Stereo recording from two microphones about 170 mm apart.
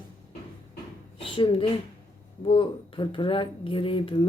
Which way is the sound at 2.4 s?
30° left (ahead or behind).